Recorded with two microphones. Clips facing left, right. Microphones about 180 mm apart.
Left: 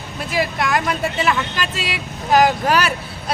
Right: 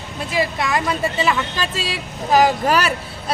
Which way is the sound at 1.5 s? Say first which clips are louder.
Right 1 dB; 30° right (ahead or behind).